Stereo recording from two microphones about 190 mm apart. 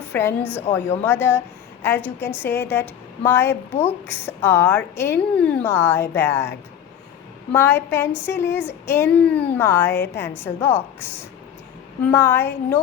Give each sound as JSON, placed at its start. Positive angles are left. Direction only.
{"t": 0.1, "sound": "a woman's voice", "side_deg": 10}
{"t": 3.7, "sound": "a woman's voice", "side_deg": 35}
{"t": 4.0, "sound": "a woman's voice", "side_deg": 10}
{"t": 7.5, "sound": "a woman's voice", "side_deg": 10}
{"t": 12.1, "sound": "a woman's voice", "side_deg": 10}